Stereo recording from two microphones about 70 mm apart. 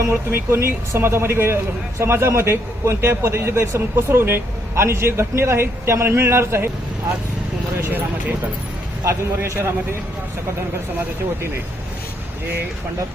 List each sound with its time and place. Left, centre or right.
0.1 s a man's voice: right
7.8 s speech: right
9.0 s a man's voice: right